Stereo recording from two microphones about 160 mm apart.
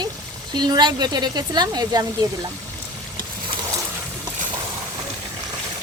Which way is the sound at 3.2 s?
25° right (ahead or behind).